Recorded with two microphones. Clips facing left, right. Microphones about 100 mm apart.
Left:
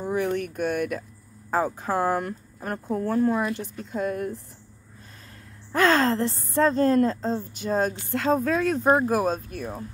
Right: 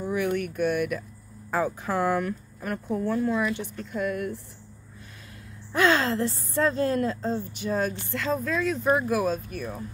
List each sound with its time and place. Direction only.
0.0 s speech: 35° left (ahead or behind)
3.9 s speech: 35° left (ahead or behind)
5.7 s speech: 40° left (ahead or behind)